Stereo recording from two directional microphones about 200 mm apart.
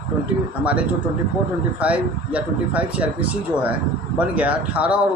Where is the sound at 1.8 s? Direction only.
5° right (ahead or behind).